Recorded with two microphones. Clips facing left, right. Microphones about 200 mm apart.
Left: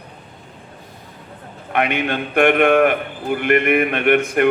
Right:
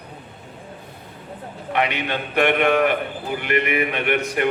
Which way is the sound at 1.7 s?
50° left (ahead or behind).